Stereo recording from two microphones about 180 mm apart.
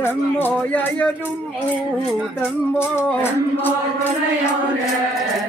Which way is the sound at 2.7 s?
15° left (ahead or behind).